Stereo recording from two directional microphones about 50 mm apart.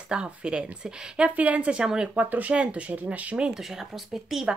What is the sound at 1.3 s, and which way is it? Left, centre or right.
Speech, right.